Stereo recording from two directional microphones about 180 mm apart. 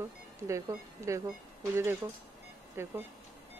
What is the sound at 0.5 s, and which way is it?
Speech, 15° right (ahead or behind).